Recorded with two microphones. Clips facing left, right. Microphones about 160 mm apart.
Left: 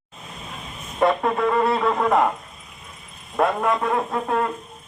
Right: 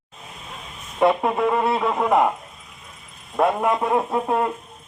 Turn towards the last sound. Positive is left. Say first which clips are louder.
# right 1 dB
turn(degrees=-15)  # may be behind; listen again after turning